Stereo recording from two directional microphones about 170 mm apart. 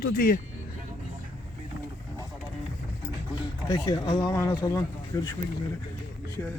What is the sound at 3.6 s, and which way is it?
Speech, 20° left (ahead or behind).